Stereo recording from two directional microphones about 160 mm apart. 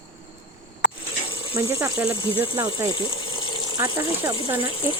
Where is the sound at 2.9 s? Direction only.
30° left (ahead or behind).